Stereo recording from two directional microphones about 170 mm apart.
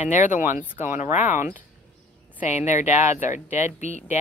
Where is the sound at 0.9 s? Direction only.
45° left (ahead or behind).